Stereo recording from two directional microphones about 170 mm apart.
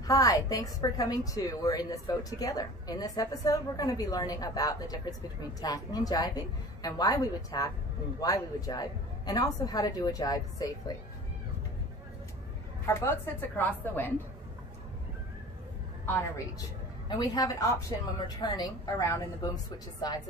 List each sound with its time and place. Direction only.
0.0 s a woman's voice: 20° left (ahead or behind)
12.8 s a woman's voice: 15° left (ahead or behind)
17.1 s a woman's voice: 25° left (ahead or behind)